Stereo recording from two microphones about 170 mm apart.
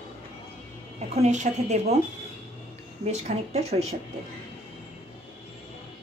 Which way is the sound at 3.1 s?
40° right (ahead or behind).